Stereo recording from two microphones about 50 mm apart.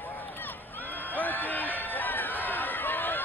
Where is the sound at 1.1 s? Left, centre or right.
Left.